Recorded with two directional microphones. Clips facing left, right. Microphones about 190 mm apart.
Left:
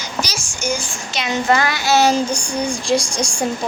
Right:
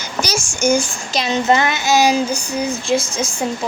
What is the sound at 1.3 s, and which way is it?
Child singing, 20° right (ahead or behind).